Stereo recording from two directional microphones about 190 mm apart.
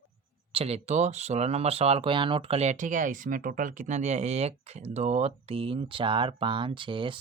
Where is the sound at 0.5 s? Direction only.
35° right (ahead or behind).